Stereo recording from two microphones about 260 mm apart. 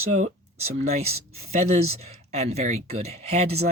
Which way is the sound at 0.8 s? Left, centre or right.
Right.